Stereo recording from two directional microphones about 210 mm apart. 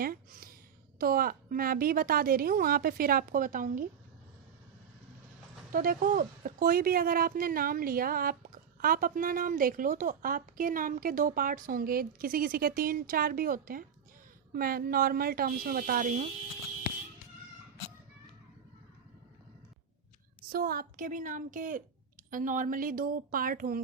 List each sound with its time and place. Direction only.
0.0 s a sound: 45° right (ahead or behind)
0.9 s speech: 45° right (ahead or behind)
5.7 s speech: 40° right (ahead or behind)
20.5 s a woman's voice: 45° right (ahead or behind)